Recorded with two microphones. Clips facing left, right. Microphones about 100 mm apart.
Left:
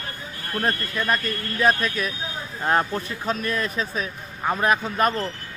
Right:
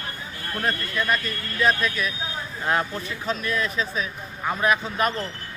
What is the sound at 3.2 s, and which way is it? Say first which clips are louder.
A man's voice: even; 45° left (ahead or behind).